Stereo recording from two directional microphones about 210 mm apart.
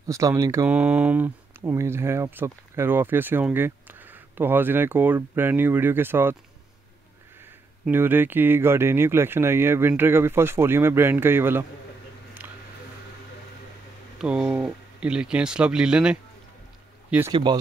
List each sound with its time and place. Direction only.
0.0 s speech: 15° right (ahead or behind)
7.8 s speech: 10° right (ahead or behind)
14.1 s speech: 5° right (ahead or behind)
17.3 s speech: 20° right (ahead or behind)